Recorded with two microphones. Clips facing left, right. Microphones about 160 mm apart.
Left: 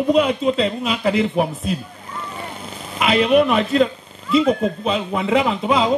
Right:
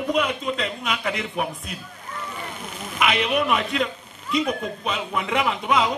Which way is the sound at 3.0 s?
30° left (ahead or behind).